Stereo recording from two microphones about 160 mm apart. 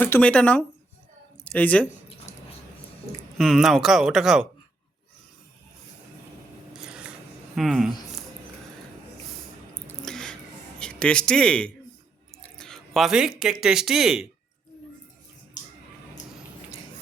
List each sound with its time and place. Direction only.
0.0 s speech: 10° left (ahead or behind)
3.3 s speech: centre (ahead or behind)
6.7 s scissors: 5° right (ahead or behind)
7.5 s speech: centre (ahead or behind)
9.8 s a sound: 5° left (ahead or behind)
10.8 s a man's voice: 5° left (ahead or behind)